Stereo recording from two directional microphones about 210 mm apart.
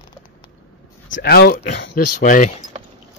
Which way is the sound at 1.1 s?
50° left (ahead or behind).